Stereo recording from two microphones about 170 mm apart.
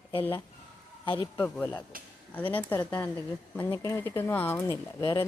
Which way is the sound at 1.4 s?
10° left (ahead or behind).